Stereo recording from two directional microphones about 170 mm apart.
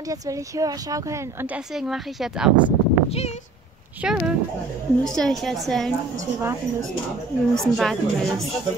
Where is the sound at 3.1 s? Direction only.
40° left (ahead or behind).